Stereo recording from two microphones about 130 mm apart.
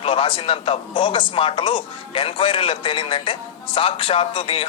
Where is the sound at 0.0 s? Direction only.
45° left (ahead or behind).